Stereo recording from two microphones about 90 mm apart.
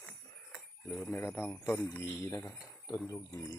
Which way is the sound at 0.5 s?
5° left (ahead or behind).